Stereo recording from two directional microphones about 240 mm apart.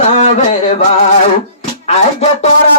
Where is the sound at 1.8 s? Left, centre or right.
Left.